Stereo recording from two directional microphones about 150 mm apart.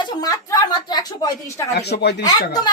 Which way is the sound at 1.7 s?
90° left.